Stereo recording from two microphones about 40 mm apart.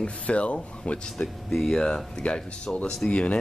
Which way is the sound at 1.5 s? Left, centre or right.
Centre.